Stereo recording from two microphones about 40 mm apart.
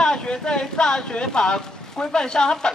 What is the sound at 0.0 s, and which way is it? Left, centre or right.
Speech, left.